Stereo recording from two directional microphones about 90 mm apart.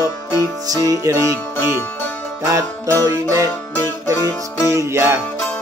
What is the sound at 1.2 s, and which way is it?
Music, 25° left (ahead or behind).